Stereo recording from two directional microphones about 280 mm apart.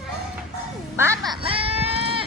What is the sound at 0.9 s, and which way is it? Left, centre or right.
Sheep, centre.